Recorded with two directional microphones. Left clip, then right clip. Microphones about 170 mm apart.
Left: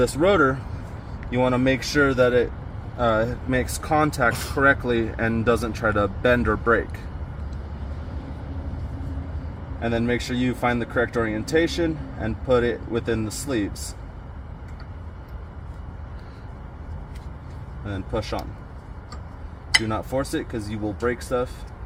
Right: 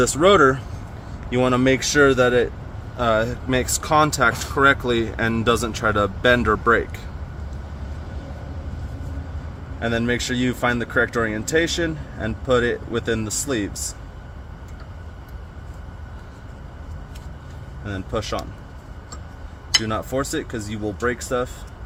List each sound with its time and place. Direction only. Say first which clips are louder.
0.0 s speech: right 4 dB; 45° right (ahead or behind)
3.0 s speech: right 2 dB; 20° right (ahead or behind)
9.8 s speech: right 2 dB; 25° right (ahead or behind)
17.8 s speech: right 2 dB; 25° right (ahead or behind)
19.9 s speech: right 2 dB; 25° right (ahead or behind)